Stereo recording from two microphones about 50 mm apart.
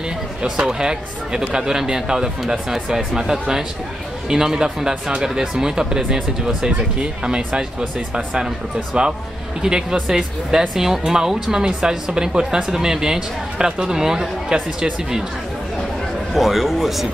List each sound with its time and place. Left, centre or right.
0.4 s a woman's voice: centre
16.3 s a man's voice: centre